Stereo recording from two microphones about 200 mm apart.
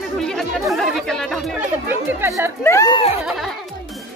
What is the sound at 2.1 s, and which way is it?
Speech, 10° right (ahead or behind).